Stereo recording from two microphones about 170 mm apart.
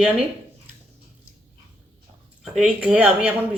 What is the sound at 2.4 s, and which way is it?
Speech, 5° right (ahead or behind).